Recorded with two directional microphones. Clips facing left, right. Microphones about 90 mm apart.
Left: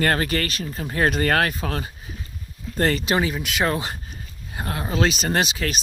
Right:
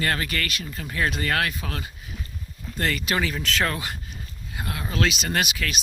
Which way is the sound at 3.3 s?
15° left (ahead or behind).